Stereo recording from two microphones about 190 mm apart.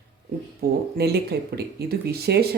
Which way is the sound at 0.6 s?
55° right (ahead or behind).